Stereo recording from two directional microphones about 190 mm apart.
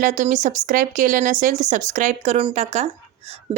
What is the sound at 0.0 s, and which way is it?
Speech, 40° right (ahead or behind).